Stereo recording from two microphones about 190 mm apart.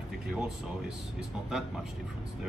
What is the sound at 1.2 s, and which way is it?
Speech, centre (ahead or behind).